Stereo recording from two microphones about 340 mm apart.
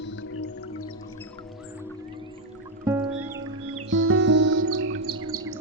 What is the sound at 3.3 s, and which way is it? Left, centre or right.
Music, right.